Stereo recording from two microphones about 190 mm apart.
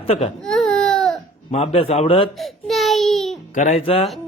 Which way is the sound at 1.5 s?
35° left (ahead or behind).